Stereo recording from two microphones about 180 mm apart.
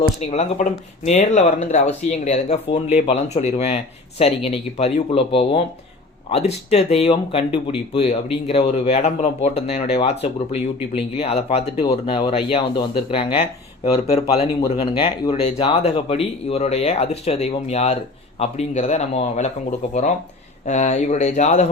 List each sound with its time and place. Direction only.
0.2 s speech: 35° left (ahead or behind)